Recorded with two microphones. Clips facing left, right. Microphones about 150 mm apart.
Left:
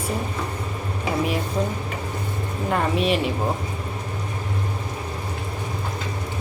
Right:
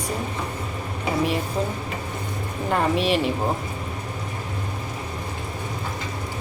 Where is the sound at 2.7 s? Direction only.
Centre (ahead or behind).